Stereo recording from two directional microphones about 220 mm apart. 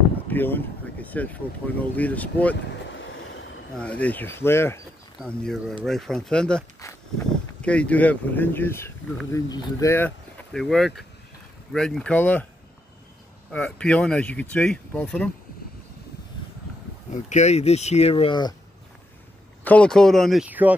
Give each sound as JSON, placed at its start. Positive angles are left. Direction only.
{"t": 0.3, "sound": "speech", "side_deg": 10}
{"t": 2.7, "sound": "vehicle", "side_deg": 55}
{"t": 3.7, "sound": "speech", "side_deg": 5}
{"t": 13.5, "sound": "speech", "side_deg": 5}
{"t": 17.1, "sound": "speech", "side_deg": 30}
{"t": 19.6, "sound": "speech", "side_deg": 5}